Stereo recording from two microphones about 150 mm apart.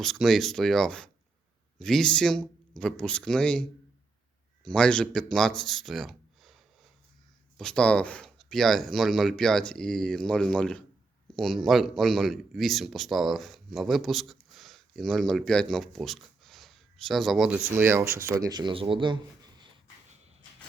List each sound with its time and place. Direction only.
0.0 s speech: centre (ahead or behind)
17.7 s speech: 15° right (ahead or behind); by 19.7 s 30° right (ahead or behind)